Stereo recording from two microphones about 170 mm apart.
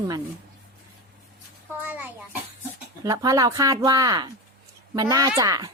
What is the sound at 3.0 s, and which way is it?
Speech, 20° right (ahead or behind).